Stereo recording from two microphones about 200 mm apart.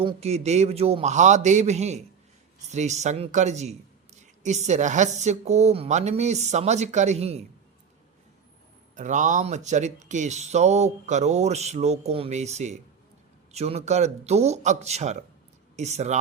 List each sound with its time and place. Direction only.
0.0 s speech: 30° right (ahead or behind)
9.0 s speech: 40° right (ahead or behind)